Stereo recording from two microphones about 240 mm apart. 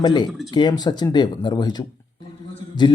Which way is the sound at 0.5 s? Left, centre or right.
Centre.